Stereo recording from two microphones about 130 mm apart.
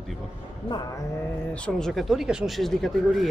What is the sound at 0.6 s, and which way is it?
Speech, 35° left (ahead or behind).